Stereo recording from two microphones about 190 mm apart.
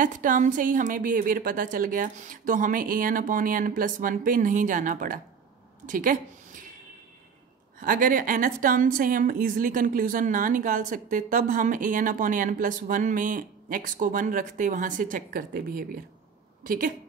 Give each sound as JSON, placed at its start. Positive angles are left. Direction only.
{"t": 0.0, "sound": "a woman's voice", "side_deg": -45}
{"t": 7.8, "sound": "a woman's voice", "side_deg": -45}